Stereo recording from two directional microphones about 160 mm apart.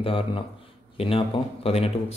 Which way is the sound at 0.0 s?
35° left (ahead or behind).